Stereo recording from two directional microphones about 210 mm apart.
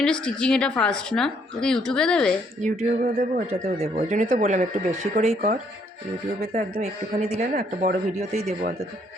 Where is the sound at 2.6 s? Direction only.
35° right (ahead or behind).